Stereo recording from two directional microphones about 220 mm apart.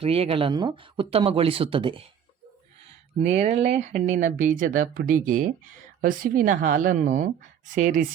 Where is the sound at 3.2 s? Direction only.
30° right (ahead or behind).